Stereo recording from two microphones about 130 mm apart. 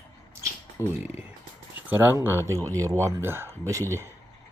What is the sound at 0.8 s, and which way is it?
Speech, 20° left (ahead or behind).